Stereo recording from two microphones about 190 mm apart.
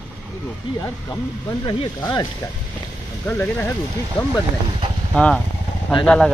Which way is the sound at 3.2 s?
10° left (ahead or behind).